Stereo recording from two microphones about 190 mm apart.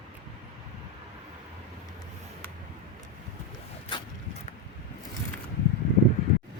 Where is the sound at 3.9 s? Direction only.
25° left (ahead or behind).